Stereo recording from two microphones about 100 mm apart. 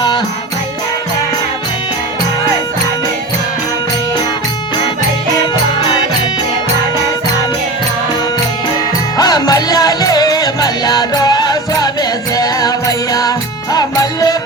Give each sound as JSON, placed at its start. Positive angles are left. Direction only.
{"t": 9.1, "sound": "music", "side_deg": 40}
{"t": 13.7, "sound": "music", "side_deg": 40}